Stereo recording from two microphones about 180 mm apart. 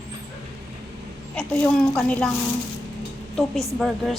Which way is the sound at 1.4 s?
10° left (ahead or behind).